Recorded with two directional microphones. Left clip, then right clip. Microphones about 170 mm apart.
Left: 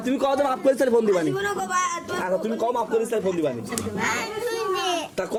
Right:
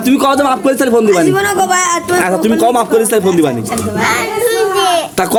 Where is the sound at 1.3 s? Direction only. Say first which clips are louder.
Right 13 dB; 60° right (ahead or behind).